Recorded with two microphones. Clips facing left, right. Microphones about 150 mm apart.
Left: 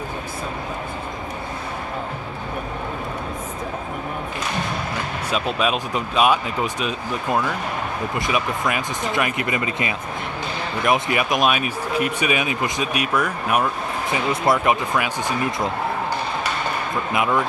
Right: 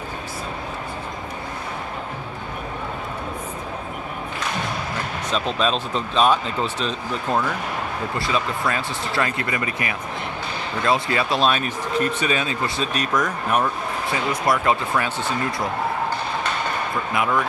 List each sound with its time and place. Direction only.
5.3 s speech: 10° left (ahead or behind)
14.1 s speech: 20° left (ahead or behind)
17.1 s speech: 20° left (ahead or behind)